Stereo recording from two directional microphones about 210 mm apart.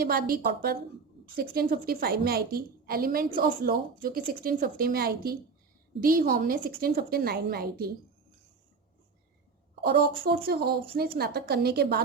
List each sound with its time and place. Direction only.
0.0 s a woman's voice: 45° right (ahead or behind)
9.8 s a woman's voice: 50° right (ahead or behind)